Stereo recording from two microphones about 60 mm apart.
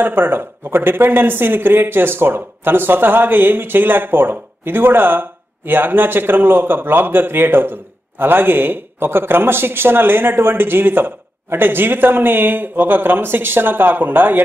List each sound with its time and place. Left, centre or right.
0.0 s speech: right